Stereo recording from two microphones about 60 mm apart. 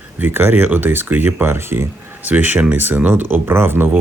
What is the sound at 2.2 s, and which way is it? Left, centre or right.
Speech, right.